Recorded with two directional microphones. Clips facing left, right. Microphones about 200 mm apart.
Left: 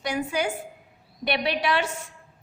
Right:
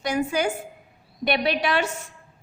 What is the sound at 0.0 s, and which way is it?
A woman's voice, 45° right (ahead or behind).